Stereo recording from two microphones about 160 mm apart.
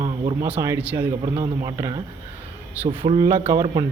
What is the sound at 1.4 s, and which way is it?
Speech, 20° right (ahead or behind).